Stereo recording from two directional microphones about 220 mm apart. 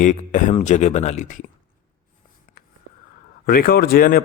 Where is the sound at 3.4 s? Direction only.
40° left (ahead or behind).